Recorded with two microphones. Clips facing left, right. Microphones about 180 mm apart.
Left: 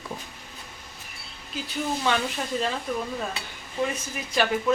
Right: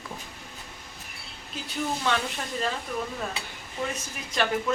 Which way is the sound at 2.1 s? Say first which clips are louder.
Left 2 dB; 5° left (ahead or behind).